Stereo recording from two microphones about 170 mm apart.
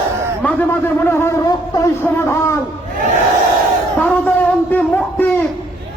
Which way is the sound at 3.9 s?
10° left (ahead or behind).